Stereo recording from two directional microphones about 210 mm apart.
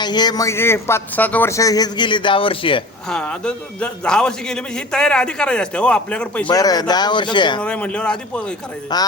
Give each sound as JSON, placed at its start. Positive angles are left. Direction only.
{"t": 0.0, "sound": "a man's voice", "side_deg": 20}
{"t": 3.1, "sound": "a man's voice", "side_deg": 5}
{"t": 6.5, "sound": "speech", "side_deg": 20}
{"t": 7.6, "sound": "a man's voice", "side_deg": 5}
{"t": 8.9, "sound": "speech", "side_deg": 20}